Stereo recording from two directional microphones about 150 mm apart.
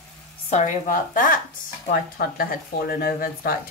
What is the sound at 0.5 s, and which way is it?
Speech, 50° left (ahead or behind).